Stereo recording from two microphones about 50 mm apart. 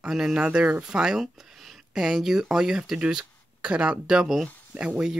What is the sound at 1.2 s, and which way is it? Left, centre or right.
Speech, centre.